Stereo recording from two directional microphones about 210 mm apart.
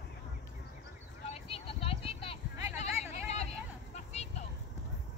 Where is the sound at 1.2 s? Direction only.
30° left (ahead or behind).